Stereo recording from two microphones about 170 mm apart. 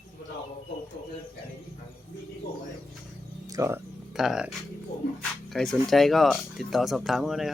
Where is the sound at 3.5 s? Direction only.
15° right (ahead or behind).